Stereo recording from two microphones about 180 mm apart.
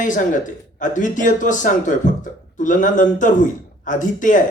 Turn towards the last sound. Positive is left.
turn(degrees=45)  # may be behind; listen again after turning